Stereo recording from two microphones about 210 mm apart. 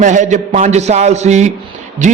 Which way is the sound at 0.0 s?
35° right (ahead or behind).